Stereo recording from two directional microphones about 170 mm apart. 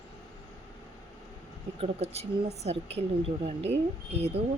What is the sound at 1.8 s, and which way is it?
A woman's voice, 40° right (ahead or behind).